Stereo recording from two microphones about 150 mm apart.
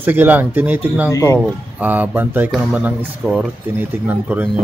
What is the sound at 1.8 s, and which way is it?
Speech, 10° right (ahead or behind).